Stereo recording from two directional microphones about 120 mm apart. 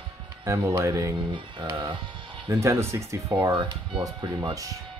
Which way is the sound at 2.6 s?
25° right (ahead or behind).